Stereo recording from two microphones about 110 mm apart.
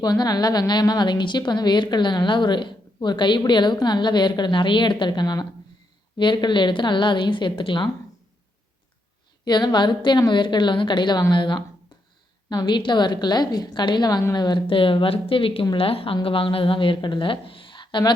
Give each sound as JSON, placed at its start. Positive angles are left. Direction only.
{"t": 0.0, "sound": "a woman's voice", "side_deg": 35}
{"t": 9.4, "sound": "a woman's voice", "side_deg": 45}